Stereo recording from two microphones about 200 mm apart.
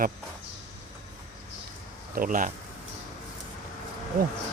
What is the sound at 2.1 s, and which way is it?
Speech, 45° right (ahead or behind).